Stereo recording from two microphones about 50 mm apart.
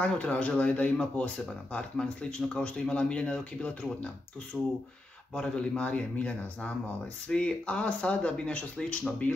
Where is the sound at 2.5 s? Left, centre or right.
Centre.